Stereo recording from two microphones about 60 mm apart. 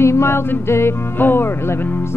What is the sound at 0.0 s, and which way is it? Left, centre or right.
Music, left.